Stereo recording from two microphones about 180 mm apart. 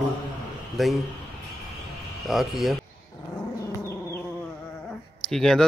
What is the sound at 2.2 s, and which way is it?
Speech, centre (ahead or behind).